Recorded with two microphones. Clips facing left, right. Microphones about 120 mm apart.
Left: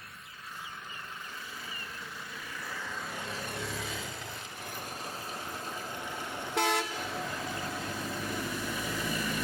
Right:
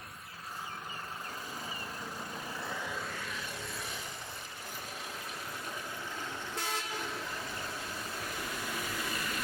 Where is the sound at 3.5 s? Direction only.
80° left.